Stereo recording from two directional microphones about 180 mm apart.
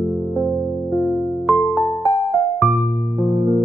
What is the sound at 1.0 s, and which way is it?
Music, 5° right (ahead or behind).